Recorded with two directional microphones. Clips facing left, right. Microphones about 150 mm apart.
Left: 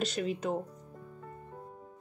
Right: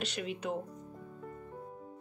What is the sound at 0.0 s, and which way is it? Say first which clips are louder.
Speech: left 5 dB; 40° left (ahead or behind).